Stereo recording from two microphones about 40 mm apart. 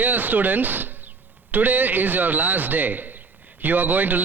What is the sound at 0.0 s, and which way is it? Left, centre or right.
A man's voice, right.